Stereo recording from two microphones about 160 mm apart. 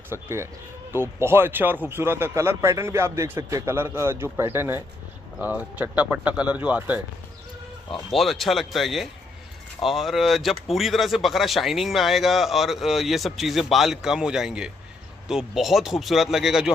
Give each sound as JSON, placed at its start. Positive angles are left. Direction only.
{"t": 0.1, "sound": "a man's voice", "side_deg": -15}
{"t": 8.1, "sound": "speech", "side_deg": 0}